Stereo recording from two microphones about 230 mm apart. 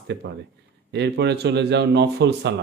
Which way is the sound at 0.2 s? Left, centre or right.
Right.